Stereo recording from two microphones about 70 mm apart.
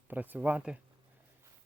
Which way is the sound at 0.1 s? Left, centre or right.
Right.